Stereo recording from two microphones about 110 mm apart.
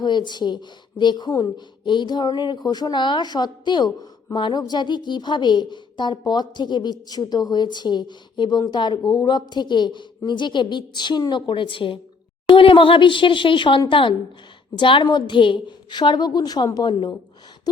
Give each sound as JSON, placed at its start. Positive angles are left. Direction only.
{"t": 0.0, "sound": "a woman's voice", "side_deg": 40}